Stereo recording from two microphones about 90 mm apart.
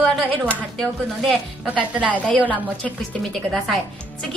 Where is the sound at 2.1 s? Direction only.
15° left (ahead or behind).